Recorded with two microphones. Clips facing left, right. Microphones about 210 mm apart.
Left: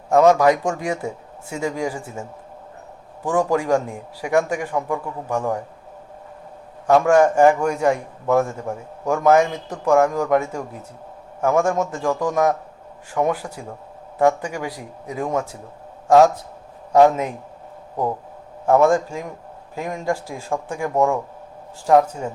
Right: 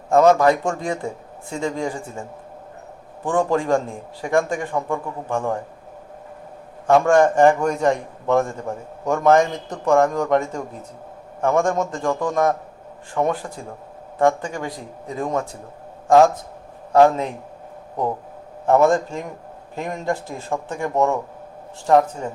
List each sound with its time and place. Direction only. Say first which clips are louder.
0.3 s a man's voice: even; 10° left (ahead or behind)
3.2 s a man's voice: even; 10° left (ahead or behind)
6.9 s a man's voice: even; 5° left (ahead or behind)
18.7 s a man's voice: even; 10° left (ahead or behind)